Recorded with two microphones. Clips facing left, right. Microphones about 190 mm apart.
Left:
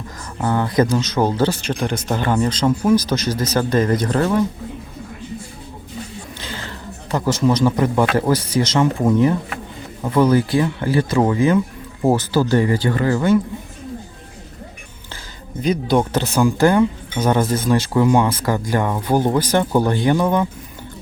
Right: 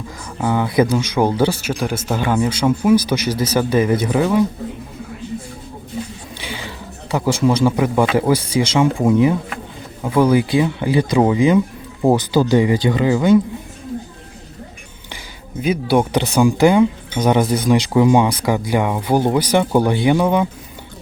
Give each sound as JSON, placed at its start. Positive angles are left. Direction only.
{"t": 0.3, "sound": "speech", "side_deg": -10}
{"t": 6.4, "sound": "speech", "side_deg": -10}
{"t": 15.6, "sound": "speech", "side_deg": -5}